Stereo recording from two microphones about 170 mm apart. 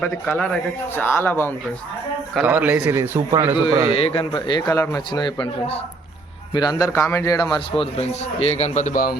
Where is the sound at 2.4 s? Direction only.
10° right (ahead or behind).